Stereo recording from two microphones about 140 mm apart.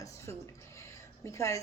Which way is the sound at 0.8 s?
20° left (ahead or behind).